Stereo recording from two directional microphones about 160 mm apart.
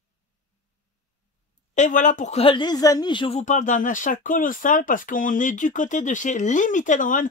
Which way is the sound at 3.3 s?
50° left (ahead or behind).